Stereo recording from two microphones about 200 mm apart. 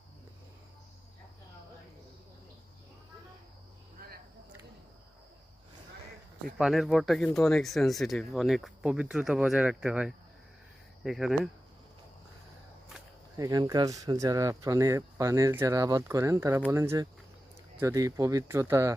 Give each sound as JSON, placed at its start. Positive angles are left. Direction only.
{"t": 6.6, "sound": "speech", "side_deg": 0}
{"t": 13.3, "sound": "speech", "side_deg": -15}